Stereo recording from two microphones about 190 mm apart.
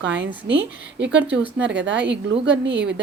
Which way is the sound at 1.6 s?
70° right (ahead or behind).